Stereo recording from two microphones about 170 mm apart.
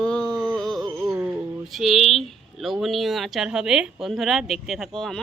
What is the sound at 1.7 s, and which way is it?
Speech, centre (ahead or behind).